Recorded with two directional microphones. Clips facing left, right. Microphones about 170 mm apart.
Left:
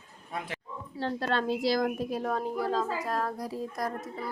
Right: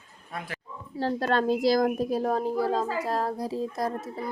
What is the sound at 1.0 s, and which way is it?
A woman's voice, 40° right (ahead or behind).